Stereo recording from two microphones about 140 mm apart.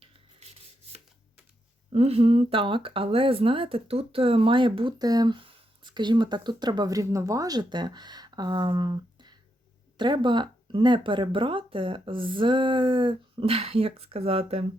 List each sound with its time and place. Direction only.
1.9 s speech: 45° right (ahead or behind)